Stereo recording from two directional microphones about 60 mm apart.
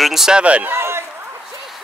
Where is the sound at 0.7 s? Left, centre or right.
Right.